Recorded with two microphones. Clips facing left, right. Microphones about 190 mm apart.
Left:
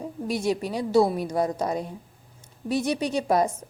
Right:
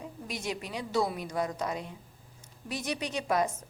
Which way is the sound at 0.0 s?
35° left (ahead or behind).